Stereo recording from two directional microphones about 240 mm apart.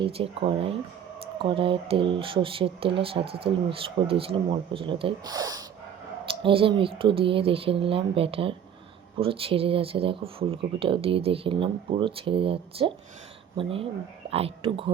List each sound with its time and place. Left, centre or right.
0.0 s speech: right